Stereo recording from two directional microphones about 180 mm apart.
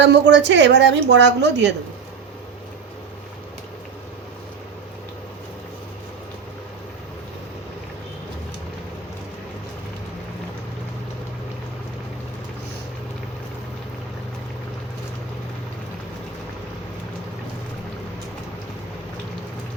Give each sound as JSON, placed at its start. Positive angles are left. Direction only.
{"t": 0.0, "sound": "a woman's voice", "side_deg": -75}